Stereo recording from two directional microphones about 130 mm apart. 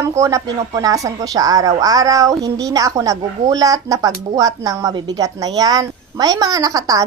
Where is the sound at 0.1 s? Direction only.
25° right (ahead or behind).